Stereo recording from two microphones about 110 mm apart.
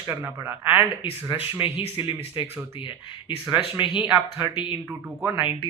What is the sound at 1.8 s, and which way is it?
Speech, 50° left (ahead or behind).